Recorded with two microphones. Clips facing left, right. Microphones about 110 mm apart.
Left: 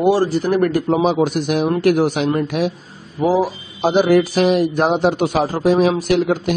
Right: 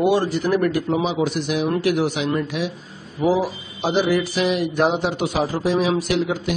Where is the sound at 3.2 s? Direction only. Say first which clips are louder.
Left 3 dB; 40° left (ahead or behind).